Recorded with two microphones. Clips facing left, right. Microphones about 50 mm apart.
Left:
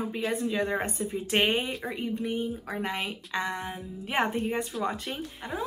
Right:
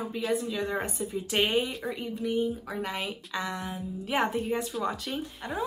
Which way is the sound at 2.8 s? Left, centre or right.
Left.